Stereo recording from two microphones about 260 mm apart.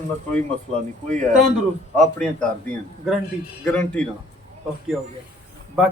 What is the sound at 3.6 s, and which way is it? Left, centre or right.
Speech, centre.